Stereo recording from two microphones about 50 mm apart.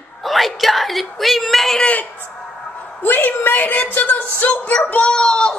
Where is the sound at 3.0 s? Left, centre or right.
Left; by 5.6 s centre.